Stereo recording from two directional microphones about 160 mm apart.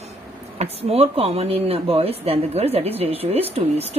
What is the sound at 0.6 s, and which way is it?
Speech, 40° right (ahead or behind).